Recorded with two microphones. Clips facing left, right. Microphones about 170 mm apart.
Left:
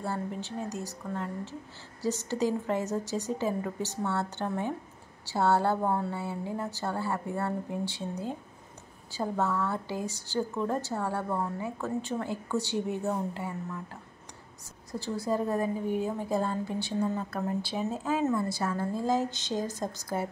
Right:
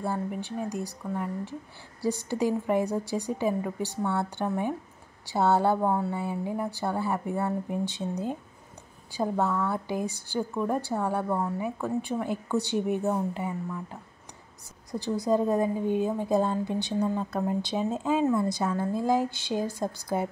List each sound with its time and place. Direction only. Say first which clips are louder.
0.0 s a woman's voice: right 3 dB; 15° right (ahead or behind)
9.1 s a woman's voice: right 3 dB; 15° right (ahead or behind)
14.9 s a woman's voice: right 5 dB; 15° right (ahead or behind)